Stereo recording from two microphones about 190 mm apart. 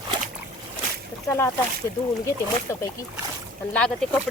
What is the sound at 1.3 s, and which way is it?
Speech, 15° left (ahead or behind).